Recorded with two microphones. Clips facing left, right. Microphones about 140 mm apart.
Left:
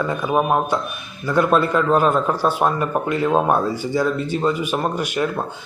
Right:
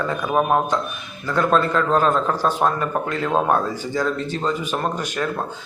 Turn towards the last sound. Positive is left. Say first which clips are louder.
# left 3 dB
turn(degrees=10)  # may be behind; listen again after turning